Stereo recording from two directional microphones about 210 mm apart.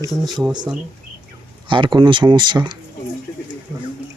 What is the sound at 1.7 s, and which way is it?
Speech, 20° right (ahead or behind).